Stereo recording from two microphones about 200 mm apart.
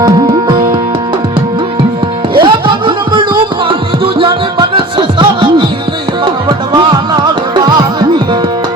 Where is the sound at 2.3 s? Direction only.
25° right (ahead or behind).